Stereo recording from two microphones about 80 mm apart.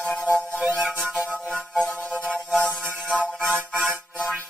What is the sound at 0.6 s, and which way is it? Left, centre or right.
Music, centre.